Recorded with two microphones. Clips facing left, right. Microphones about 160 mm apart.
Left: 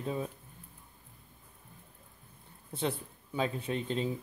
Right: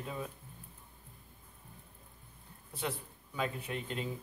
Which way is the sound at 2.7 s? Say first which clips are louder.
Left 5 dB; 30° left (ahead or behind).